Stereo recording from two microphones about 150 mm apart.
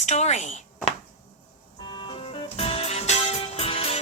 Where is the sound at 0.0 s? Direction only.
50° left (ahead or behind).